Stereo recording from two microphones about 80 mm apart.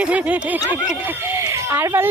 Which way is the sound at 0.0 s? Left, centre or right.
Centre.